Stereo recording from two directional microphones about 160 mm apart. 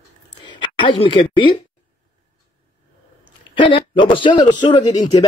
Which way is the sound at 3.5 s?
30° left (ahead or behind).